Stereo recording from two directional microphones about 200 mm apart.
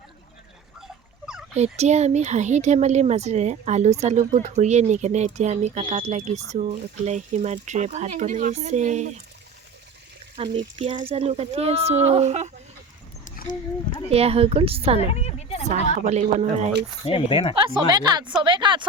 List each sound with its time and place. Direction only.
1.5 s speech: 35° right (ahead or behind)
10.3 s speech: 25° right (ahead or behind)
13.2 s a sound: 40° left (ahead or behind)
14.1 s a woman's voice: 30° right (ahead or behind)
15.0 s a sound: 30° left (ahead or behind)
16.0 s speech: 40° right (ahead or behind)
17.1 s speech: 25° left (ahead or behind)
17.5 s a woman's voice: 20° right (ahead or behind)